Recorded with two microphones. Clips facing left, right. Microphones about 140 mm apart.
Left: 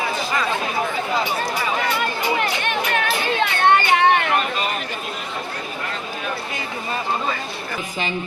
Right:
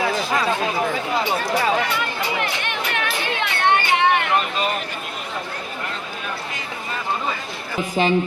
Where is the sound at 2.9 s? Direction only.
35° left (ahead or behind).